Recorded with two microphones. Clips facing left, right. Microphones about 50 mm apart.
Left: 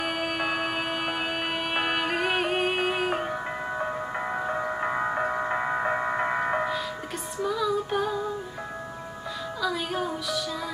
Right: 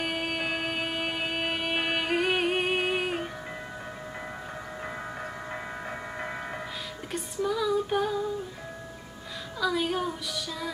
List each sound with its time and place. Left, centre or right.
0.0 s music: centre
3.7 s music: left
7.4 s female singing: centre
9.6 s music: centre